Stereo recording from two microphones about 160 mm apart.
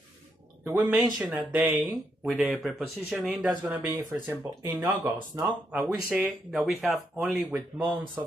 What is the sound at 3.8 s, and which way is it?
Speech, 20° right (ahead or behind).